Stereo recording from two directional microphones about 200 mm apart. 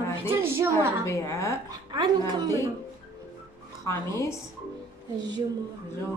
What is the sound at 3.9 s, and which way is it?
Speech, 15° left (ahead or behind).